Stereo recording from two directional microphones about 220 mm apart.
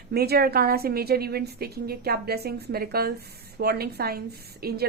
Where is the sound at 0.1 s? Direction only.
45° right (ahead or behind).